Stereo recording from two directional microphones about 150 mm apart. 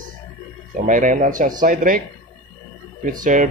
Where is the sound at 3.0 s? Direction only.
65° right (ahead or behind).